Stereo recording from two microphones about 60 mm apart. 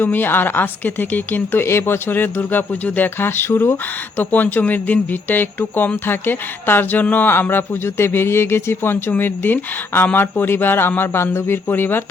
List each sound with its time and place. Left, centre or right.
0.0 s speech: left
1.6 s speech: left